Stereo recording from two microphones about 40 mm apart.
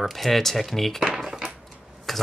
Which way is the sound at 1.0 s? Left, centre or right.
Right.